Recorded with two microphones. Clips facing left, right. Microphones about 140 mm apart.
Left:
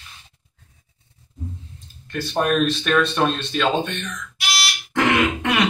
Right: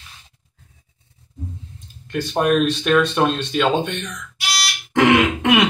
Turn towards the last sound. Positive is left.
turn(degrees=-15)  # may be behind; listen again after turning